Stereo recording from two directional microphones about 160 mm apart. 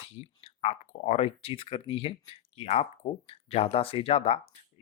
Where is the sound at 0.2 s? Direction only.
40° left (ahead or behind).